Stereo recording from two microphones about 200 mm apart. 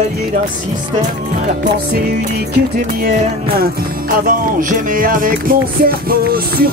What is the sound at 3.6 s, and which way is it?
Music, 45° right (ahead or behind).